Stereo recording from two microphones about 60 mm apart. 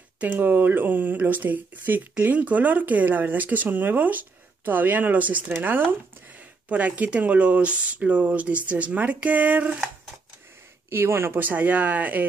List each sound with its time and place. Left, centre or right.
0.3 s speech: right
6.7 s speech: right
10.9 s speech: right
11.3 s speech: right